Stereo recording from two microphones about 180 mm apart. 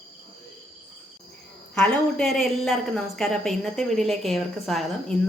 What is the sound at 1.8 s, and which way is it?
A woman's voice, centre (ahead or behind).